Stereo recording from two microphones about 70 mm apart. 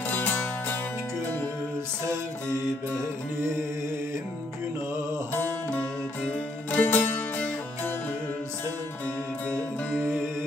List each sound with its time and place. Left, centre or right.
0.1 s music: left
6.7 s music: left